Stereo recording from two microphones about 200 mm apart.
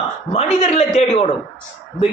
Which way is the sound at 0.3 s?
35° left (ahead or behind).